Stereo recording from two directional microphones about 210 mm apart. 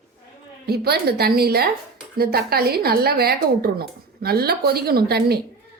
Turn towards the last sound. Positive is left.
turn(degrees=-50)  # may be behind; listen again after turning